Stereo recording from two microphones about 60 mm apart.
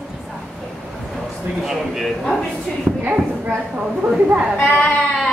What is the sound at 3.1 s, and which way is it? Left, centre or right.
A woman's voice, right.